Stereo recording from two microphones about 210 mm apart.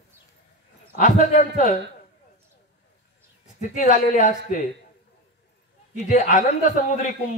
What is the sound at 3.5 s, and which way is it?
Speech, 35° left (ahead or behind).